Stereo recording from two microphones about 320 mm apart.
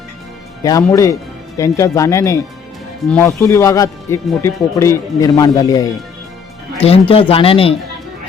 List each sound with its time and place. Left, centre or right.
0.6 s a man's voice: centre